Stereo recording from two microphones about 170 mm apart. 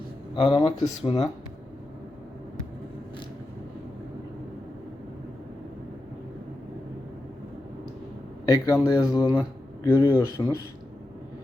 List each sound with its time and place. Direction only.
0.3 s speech: 35° left (ahead or behind)
8.4 s speech: 20° left (ahead or behind)